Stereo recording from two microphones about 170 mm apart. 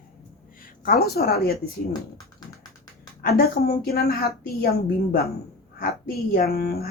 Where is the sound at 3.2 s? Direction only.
60° left (ahead or behind).